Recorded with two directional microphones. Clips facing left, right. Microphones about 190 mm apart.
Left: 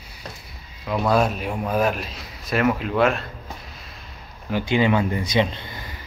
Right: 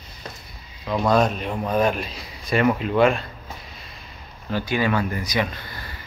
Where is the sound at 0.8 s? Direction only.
5° left (ahead or behind).